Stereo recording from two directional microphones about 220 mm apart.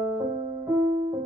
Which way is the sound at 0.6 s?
10° right (ahead or behind).